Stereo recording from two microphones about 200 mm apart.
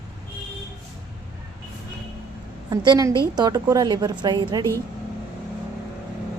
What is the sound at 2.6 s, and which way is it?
A woman's voice, 20° right (ahead or behind).